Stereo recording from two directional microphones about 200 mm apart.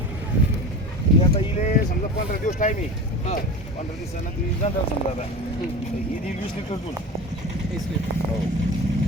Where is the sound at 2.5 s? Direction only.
35° left (ahead or behind).